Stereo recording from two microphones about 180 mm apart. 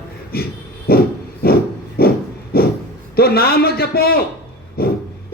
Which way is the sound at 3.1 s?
60° left (ahead or behind).